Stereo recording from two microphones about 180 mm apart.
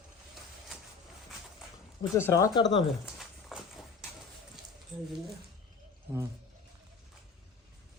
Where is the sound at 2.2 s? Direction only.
15° left (ahead or behind).